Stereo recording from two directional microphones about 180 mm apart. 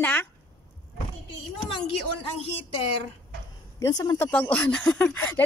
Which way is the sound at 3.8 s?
20° left (ahead or behind).